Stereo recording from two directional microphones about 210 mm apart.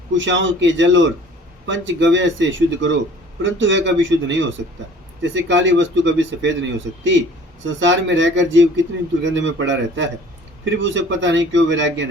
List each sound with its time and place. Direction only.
0.2 s speech: 60° right (ahead or behind)